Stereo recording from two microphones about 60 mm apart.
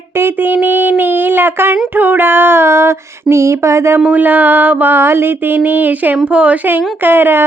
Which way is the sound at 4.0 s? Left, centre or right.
Right.